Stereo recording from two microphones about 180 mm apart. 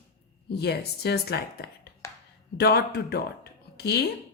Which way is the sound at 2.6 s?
65° left (ahead or behind).